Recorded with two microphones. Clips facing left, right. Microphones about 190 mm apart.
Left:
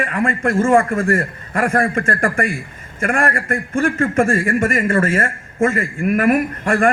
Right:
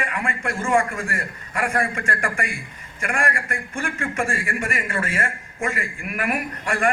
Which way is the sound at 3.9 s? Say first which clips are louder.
Left 8 dB; 55° left (ahead or behind).